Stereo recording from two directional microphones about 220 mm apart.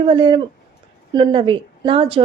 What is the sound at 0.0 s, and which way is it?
A woman's voice, 25° right (ahead or behind).